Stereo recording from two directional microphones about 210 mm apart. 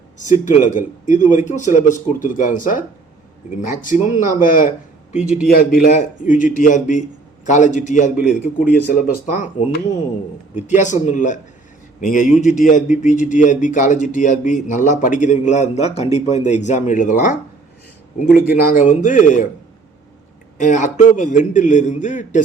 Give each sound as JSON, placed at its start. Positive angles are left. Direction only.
{"t": 0.4, "sound": "a man's voice", "side_deg": 35}
{"t": 10.7, "sound": "a man's voice", "side_deg": 35}
{"t": 20.6, "sound": "a man's voice", "side_deg": 35}